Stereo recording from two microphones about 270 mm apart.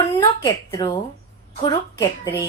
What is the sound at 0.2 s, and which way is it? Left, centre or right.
A woman's voice, centre.